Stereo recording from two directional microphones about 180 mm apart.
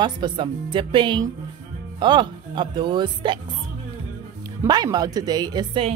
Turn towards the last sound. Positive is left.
turn(degrees=-30)  # may be behind; listen again after turning